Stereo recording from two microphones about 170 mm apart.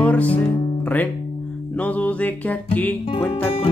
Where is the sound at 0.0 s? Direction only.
10° left (ahead or behind).